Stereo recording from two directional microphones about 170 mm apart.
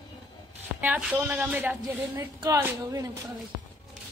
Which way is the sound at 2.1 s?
20° right (ahead or behind).